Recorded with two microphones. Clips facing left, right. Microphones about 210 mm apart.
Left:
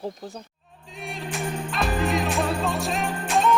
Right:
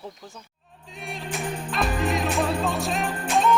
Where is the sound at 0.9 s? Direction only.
Centre (ahead or behind).